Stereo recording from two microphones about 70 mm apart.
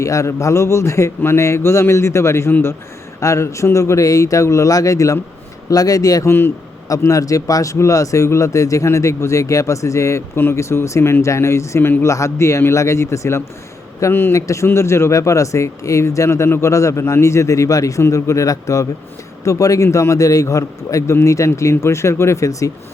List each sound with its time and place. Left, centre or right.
0.0 s speech: left
3.2 s speech: left
12.0 s speech: left
14.3 s speech: left